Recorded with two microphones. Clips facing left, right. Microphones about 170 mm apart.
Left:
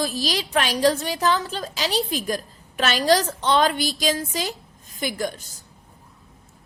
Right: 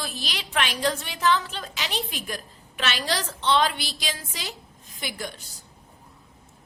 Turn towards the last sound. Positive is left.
turn(degrees=45)  # may be behind; listen again after turning